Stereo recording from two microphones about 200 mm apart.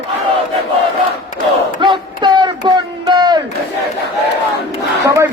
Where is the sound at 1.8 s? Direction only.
25° right (ahead or behind).